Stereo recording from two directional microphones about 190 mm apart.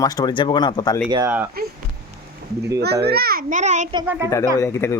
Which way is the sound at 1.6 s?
50° right (ahead or behind).